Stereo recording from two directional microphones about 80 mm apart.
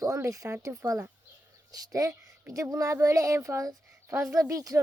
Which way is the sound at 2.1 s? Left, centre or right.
Right.